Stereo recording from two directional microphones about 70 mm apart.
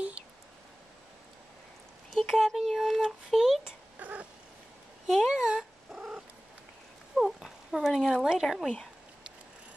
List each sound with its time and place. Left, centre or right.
2.0 s speech: centre
4.0 s cat: right
5.0 s cat: centre
7.2 s speech: centre